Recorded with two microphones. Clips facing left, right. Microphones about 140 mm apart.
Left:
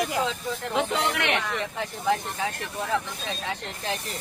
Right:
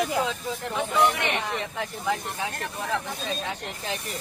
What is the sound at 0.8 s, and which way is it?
Speech, 75° left (ahead or behind).